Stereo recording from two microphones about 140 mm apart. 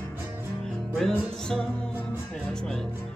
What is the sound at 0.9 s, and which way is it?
Music, 5° left (ahead or behind).